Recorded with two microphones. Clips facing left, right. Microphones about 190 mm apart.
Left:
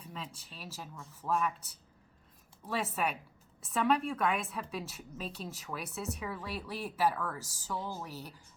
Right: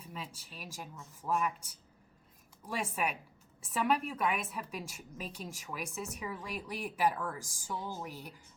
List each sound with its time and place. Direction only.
0.0 s speech: 10° right (ahead or behind)
7.3 s speech: 50° right (ahead or behind)
8.0 s speech: 15° right (ahead or behind)